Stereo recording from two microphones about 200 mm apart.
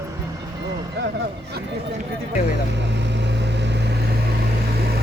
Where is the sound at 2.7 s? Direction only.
60° right (ahead or behind).